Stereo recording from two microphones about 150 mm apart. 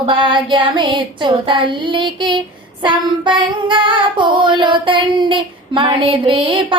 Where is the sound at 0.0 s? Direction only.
30° right (ahead or behind).